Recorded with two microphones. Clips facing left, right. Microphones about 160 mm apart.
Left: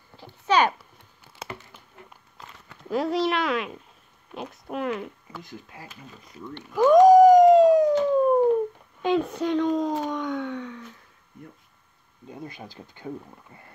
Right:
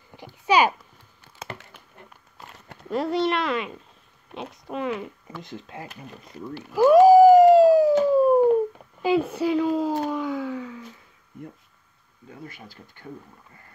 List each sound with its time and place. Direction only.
0.1 s a sound: 15° right (ahead or behind)
0.5 s a child's voice: 10° right (ahead or behind)
2.9 s speech: centre (ahead or behind)
5.4 s speech: 25° right (ahead or behind)
6.5 s a sound: 5° right (ahead or behind)
8.0 s howl: 5° right (ahead or behind)
9.0 s speech: 5° right (ahead or behind)
12.4 s speech: 20° left (ahead or behind)